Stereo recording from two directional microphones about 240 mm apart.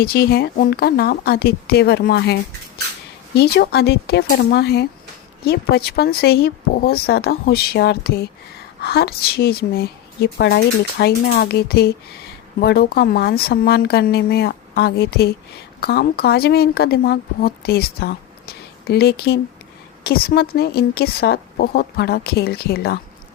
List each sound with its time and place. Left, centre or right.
0.0 s a woman's voice: left